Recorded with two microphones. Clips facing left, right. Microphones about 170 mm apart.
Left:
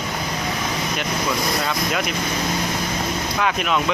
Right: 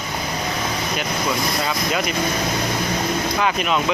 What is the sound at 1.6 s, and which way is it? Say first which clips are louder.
Speech: right 1 dB; centre (ahead or behind).